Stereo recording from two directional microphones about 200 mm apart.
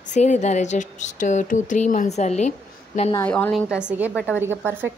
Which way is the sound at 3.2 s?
5° left (ahead or behind).